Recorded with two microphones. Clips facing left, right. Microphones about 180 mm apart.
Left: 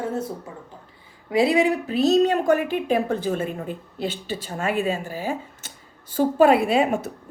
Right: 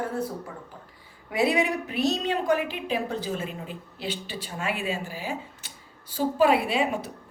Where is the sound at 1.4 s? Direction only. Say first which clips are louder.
Left 4 dB; 30° left (ahead or behind).